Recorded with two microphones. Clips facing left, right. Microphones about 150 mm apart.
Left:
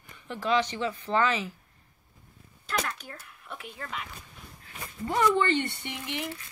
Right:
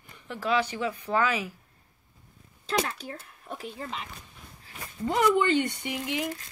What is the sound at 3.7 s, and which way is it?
Speech, 25° right (ahead or behind).